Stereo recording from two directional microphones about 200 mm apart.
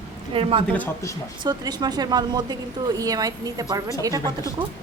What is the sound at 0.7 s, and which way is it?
Speech, 10° left (ahead or behind).